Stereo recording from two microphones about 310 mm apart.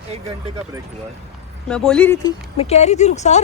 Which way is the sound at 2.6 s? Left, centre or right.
Left.